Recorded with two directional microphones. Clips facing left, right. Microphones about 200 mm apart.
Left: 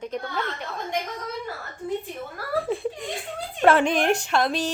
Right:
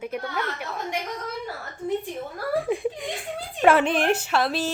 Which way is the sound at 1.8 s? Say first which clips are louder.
Right 2 dB; 20° right (ahead or behind).